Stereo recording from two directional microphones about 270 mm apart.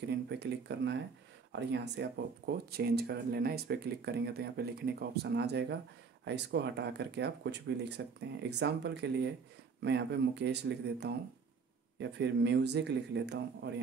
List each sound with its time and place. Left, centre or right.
0.3 s speech: right